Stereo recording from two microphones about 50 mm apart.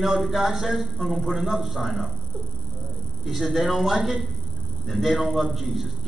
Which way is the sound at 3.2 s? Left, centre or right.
Centre.